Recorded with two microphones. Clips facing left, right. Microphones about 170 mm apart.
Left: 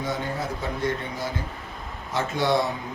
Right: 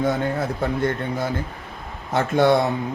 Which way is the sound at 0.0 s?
60° right (ahead or behind).